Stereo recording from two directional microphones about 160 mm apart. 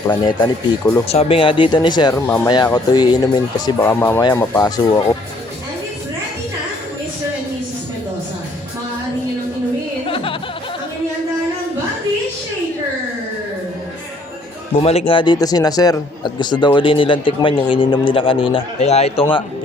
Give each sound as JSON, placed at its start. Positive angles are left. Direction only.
{"t": 0.2, "sound": "speech", "side_deg": 25}
{"t": 1.0, "sound": "a man's voice", "side_deg": 40}
{"t": 3.8, "sound": "speech", "side_deg": 15}
{"t": 14.8, "sound": "a man's voice", "side_deg": 35}